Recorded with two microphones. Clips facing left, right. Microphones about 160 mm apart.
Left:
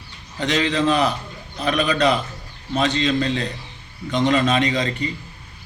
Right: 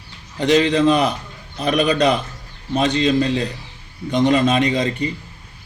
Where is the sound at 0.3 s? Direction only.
35° right (ahead or behind).